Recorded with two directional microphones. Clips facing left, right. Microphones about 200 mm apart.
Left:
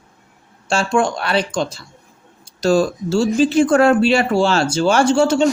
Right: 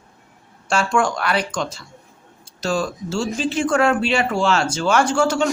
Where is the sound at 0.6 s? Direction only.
25° left (ahead or behind).